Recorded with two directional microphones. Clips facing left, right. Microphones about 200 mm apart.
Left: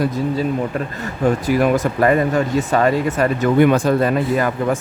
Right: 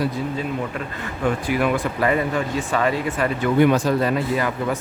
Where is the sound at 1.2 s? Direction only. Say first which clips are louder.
Left 5 dB; 40° left (ahead or behind).